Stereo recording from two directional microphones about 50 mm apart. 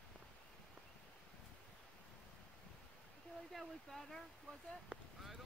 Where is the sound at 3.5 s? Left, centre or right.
Centre.